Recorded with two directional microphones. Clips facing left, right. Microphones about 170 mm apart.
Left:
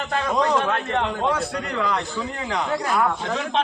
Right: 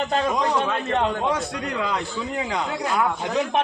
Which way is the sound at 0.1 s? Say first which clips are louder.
Left 4 dB; 20° right (ahead or behind).